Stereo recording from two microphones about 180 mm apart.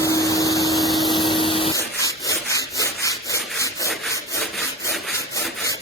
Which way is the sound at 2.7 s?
20° left (ahead or behind).